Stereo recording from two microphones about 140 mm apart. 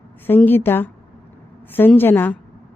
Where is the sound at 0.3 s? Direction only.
15° left (ahead or behind).